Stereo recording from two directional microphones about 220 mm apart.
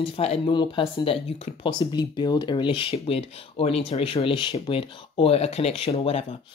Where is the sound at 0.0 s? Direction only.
25° left (ahead or behind).